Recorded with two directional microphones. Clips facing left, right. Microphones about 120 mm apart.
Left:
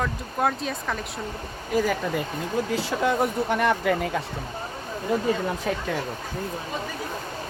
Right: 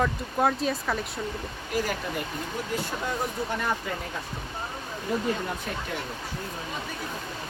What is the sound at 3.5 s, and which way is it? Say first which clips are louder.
Speech: left 7 dB; 80° left.